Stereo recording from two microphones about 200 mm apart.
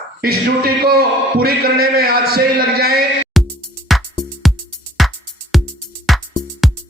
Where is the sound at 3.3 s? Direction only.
Centre (ahead or behind).